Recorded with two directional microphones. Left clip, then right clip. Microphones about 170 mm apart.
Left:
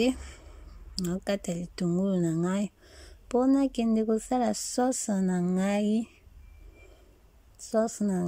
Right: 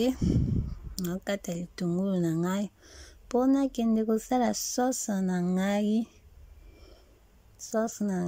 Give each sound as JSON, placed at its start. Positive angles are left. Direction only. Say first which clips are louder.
{"t": 0.0, "sound": "speech", "louder": "even", "side_deg": 5}
{"t": 7.5, "sound": "a woman's voice", "louder": "left 3 dB", "side_deg": 10}